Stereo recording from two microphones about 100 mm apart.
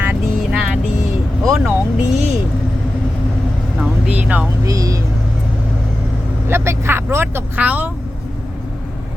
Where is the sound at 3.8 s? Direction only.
10° right (ahead or behind).